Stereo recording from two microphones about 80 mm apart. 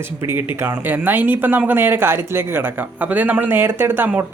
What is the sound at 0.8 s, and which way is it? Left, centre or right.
Speech, right.